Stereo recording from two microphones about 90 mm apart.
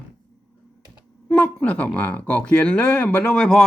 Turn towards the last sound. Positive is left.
turn(degrees=10)  # may be behind; listen again after turning